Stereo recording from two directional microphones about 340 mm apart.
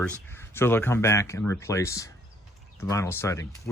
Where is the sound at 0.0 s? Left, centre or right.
Centre.